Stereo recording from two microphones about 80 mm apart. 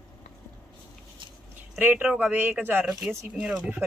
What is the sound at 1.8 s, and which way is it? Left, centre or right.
Speech, right.